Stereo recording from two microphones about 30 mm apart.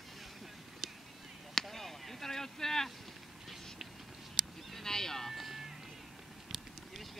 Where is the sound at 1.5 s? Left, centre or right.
Centre.